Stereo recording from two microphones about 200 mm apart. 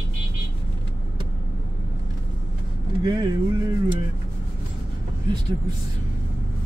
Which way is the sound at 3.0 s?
20° right (ahead or behind).